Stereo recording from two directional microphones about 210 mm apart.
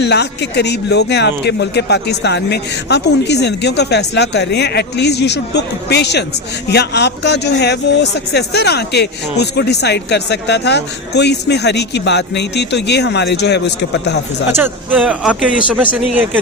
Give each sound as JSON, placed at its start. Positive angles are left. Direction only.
{"t": 0.0, "sound": "speech", "side_deg": 55}
{"t": 14.5, "sound": "speech", "side_deg": -10}